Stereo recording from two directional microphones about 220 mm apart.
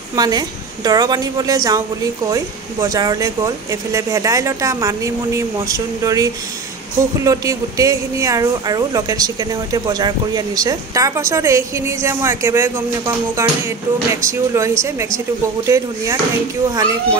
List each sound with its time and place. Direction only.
0.1 s speech: 15° right (ahead or behind)